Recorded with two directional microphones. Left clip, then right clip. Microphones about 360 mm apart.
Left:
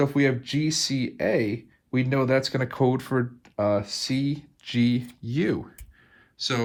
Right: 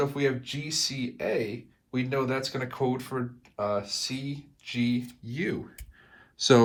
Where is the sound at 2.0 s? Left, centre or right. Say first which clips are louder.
Left 5 dB; left.